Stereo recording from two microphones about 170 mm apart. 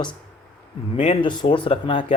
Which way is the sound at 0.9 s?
35° left (ahead or behind).